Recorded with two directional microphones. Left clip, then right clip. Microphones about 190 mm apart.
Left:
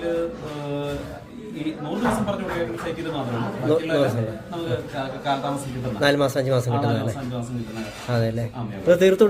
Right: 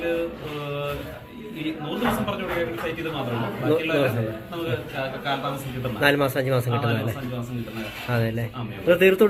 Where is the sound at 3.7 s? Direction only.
15° left (ahead or behind).